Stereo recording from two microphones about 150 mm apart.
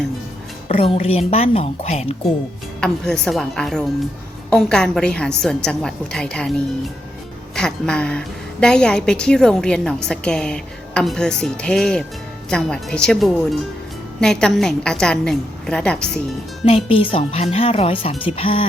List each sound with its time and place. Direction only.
0.7 s a woman's voice: 40° left (ahead or behind)
2.8 s a woman's voice: 5° left (ahead or behind)
16.6 s a woman's voice: 40° left (ahead or behind)